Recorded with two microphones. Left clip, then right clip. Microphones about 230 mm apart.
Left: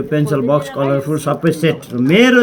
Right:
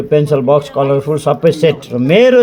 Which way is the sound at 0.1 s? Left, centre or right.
Right.